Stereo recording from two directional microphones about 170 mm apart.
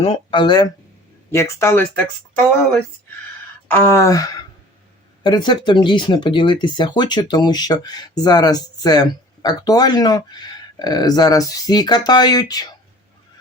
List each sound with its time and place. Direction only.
0.0 s speech: 30° left (ahead or behind); by 1.9 s 15° left (ahead or behind)
3.7 s speech: 15° left (ahead or behind)